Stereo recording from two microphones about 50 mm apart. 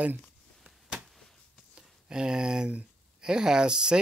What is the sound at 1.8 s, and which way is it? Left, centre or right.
Speech, centre.